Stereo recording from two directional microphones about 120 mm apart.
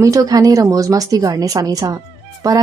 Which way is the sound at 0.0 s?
30° right (ahead or behind).